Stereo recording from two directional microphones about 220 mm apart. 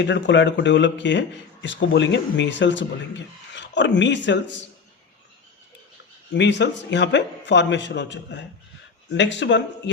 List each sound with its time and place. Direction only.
0.0 s a man's voice: 55° left (ahead or behind)
6.3 s a man's voice: 55° left (ahead or behind)